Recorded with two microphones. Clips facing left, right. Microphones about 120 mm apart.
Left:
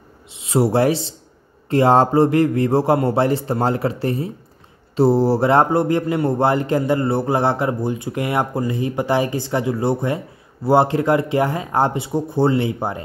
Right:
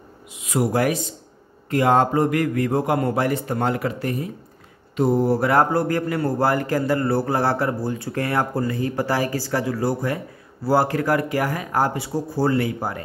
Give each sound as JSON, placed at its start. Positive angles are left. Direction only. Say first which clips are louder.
{"t": 0.3, "sound": "a man's voice", "louder": "left 4 dB", "side_deg": 30}